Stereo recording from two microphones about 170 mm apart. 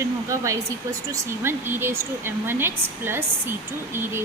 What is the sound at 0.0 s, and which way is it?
Hair dryer, 20° right (ahead or behind).